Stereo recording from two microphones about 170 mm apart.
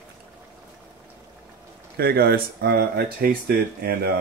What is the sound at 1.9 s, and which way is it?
Speech, 65° right (ahead or behind).